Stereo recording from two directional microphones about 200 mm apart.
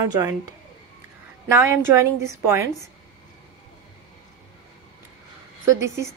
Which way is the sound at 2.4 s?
10° right (ahead or behind).